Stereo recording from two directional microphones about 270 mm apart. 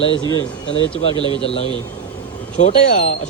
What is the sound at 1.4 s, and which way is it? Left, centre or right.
Speech, left.